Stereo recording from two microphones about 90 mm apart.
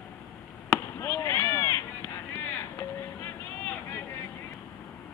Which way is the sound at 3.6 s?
20° left (ahead or behind).